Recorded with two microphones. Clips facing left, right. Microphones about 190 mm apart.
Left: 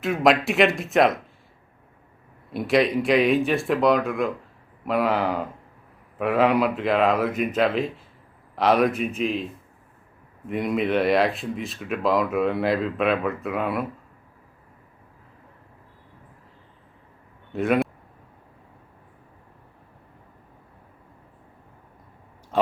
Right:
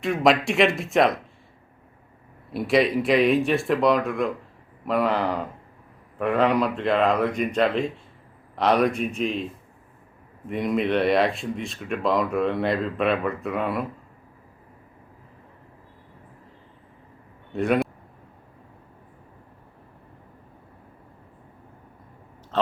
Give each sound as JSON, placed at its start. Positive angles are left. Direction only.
{"t": 0.0, "sound": "speech", "side_deg": 0}
{"t": 2.5, "sound": "speech", "side_deg": 0}
{"t": 10.5, "sound": "speech", "side_deg": 0}
{"t": 17.5, "sound": "a man's voice", "side_deg": 0}